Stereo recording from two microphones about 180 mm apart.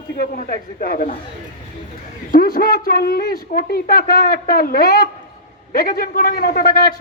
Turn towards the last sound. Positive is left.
turn(degrees=55)  # may be behind; listen again after turning